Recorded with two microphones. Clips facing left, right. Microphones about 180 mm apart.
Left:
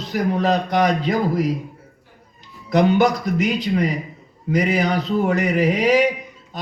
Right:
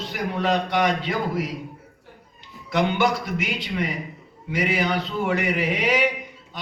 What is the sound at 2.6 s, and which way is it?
A man's voice, 40° left (ahead or behind).